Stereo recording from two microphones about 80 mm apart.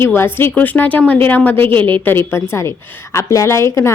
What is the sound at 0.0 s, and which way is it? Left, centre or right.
A woman's voice, left.